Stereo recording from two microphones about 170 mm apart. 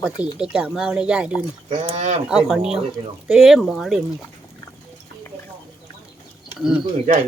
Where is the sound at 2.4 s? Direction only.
5° right (ahead or behind).